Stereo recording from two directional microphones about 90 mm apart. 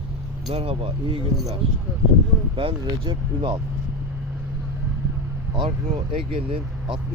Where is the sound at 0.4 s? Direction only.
90° right.